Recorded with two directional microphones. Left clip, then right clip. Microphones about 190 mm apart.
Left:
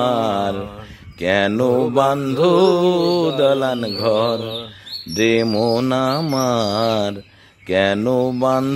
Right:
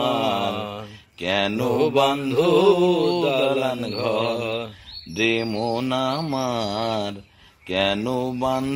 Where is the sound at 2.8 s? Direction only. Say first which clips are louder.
Left 3 dB; 55° left (ahead or behind).